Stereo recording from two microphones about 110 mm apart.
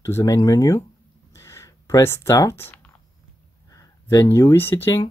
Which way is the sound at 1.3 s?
30° left (ahead or behind).